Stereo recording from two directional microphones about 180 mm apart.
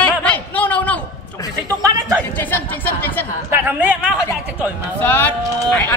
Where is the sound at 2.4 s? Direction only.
10° left (ahead or behind).